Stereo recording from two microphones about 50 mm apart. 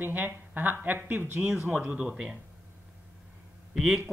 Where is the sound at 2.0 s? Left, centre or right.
Centre.